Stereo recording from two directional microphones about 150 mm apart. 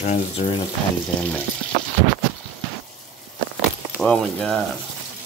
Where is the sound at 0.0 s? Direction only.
55° left (ahead or behind).